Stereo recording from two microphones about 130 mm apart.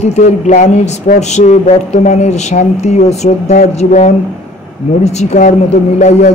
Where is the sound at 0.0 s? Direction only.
60° left (ahead or behind).